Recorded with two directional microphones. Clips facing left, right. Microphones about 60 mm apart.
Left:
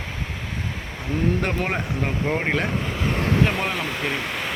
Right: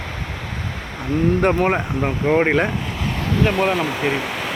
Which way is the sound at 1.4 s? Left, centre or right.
Right.